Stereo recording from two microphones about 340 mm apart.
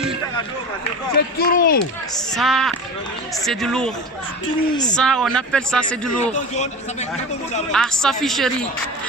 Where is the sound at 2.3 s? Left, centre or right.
Centre.